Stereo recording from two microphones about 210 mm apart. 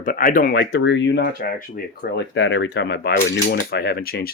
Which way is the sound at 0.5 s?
55° left (ahead or behind).